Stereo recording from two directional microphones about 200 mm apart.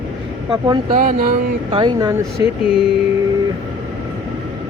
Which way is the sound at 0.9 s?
45° right (ahead or behind).